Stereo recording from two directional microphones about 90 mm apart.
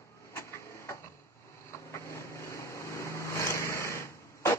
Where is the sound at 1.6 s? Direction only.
30° left (ahead or behind).